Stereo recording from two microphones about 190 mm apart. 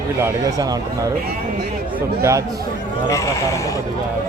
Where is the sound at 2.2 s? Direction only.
15° right (ahead or behind).